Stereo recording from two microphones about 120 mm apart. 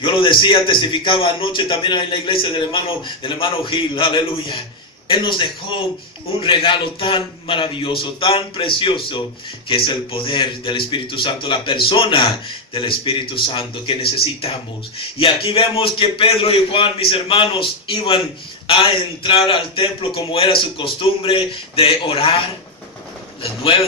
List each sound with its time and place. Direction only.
0.0 s speech: 45° left (ahead or behind)